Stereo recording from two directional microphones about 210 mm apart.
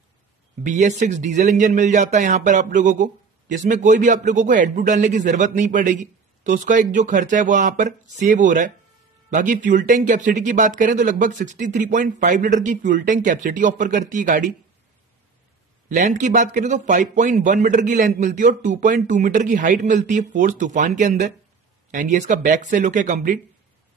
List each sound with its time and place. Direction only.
0.7 s speech: 35° right (ahead or behind)
15.9 s speech: 35° right (ahead or behind)